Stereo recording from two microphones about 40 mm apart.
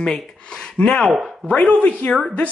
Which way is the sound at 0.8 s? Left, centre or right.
Left.